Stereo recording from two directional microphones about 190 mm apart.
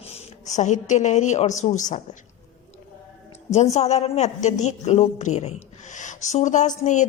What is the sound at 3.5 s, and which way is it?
A woman's voice, 35° left (ahead or behind).